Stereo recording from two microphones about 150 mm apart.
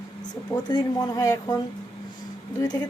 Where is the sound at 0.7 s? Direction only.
25° left (ahead or behind).